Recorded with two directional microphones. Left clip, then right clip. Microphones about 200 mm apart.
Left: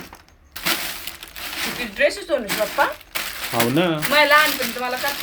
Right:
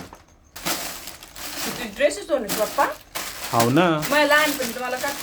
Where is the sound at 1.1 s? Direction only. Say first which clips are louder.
Left 5 dB; 15° right (ahead or behind).